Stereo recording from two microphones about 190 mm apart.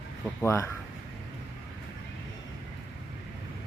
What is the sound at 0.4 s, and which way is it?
Speech, 15° left (ahead or behind).